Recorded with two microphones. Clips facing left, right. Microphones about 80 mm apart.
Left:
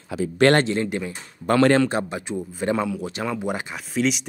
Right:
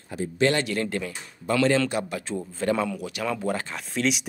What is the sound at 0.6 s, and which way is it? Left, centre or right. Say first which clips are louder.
Speech: left 3 dB; left.